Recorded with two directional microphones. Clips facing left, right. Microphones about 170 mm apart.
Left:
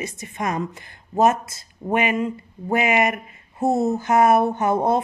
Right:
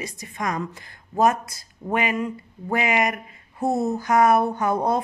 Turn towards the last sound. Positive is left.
turn(degrees=25)  # may be behind; listen again after turning